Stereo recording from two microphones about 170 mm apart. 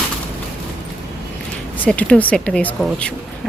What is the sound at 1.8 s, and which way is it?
A woman's voice, 5° left (ahead or behind).